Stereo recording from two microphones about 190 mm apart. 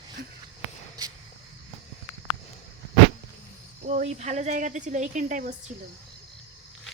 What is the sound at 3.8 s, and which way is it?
A woman's voice, 35° right (ahead or behind).